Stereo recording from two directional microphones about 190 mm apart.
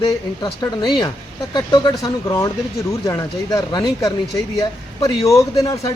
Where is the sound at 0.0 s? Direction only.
20° left (ahead or behind).